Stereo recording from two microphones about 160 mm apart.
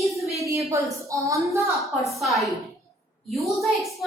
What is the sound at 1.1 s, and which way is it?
Speech, 20° right (ahead or behind).